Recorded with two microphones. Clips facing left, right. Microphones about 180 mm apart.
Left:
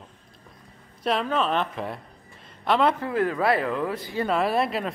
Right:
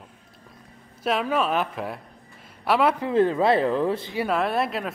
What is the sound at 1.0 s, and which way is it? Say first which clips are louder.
A man's voice: right 1 dB; 5° right (ahead or behind).